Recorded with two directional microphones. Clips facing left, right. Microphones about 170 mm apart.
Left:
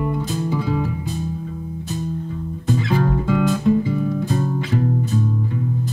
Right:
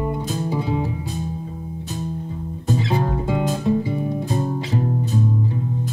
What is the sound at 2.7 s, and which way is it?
Music, 25° right (ahead or behind).